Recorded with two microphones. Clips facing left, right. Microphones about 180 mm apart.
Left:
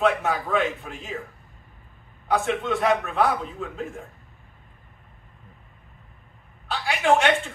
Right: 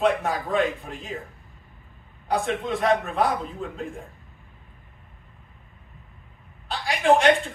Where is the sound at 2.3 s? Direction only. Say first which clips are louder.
Left 1 dB; centre (ahead or behind).